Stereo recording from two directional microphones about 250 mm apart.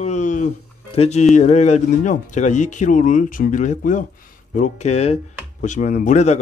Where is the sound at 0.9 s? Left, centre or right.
Left.